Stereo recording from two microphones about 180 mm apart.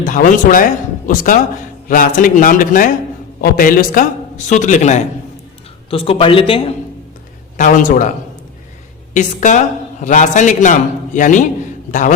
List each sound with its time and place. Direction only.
0.0 s a man's voice: 45° left (ahead or behind); by 6.7 s 30° left (ahead or behind)
7.5 s a man's voice: 45° left (ahead or behind)
9.1 s a man's voice: 45° left (ahead or behind)